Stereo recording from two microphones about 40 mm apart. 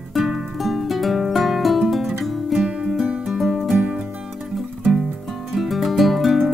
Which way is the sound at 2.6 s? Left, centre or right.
Right.